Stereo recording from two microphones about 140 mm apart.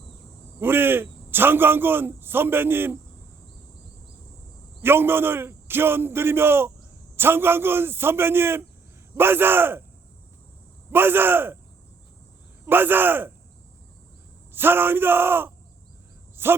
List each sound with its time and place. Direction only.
0.6 s a man's voice: 15° right (ahead or behind)
4.8 s a man's voice: 15° right (ahead or behind)
10.9 s a man's voice: 15° right (ahead or behind)
12.6 s a man's voice: 15° right (ahead or behind)
14.5 s a man's voice: 15° right (ahead or behind)
16.3 s a sound: 15° right (ahead or behind)